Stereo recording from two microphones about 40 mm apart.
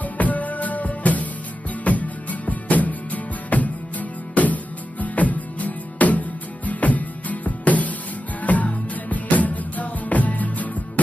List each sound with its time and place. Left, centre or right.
0.0 s music: left